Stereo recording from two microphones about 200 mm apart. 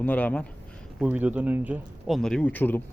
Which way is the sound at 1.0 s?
5° right (ahead or behind).